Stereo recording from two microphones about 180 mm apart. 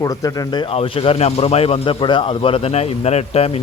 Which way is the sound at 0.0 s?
20° left (ahead or behind).